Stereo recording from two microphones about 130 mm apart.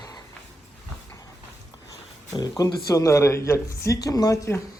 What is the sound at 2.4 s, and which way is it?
Speech, 30° left (ahead or behind).